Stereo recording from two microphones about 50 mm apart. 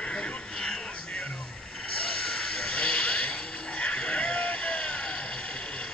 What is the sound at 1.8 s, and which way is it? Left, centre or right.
Vehicle, centre.